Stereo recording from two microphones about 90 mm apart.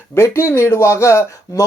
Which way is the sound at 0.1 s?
30° left (ahead or behind).